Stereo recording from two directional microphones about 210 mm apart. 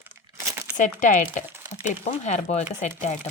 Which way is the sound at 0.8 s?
35° left (ahead or behind).